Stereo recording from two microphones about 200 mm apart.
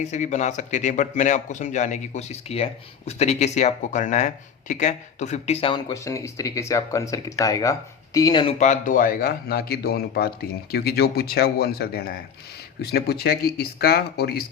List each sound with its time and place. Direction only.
0.0 s speech: 35° left (ahead or behind)
5.9 s speech: 15° left (ahead or behind)
8.5 s speech: 35° left (ahead or behind); by 14.4 s 50° left (ahead or behind)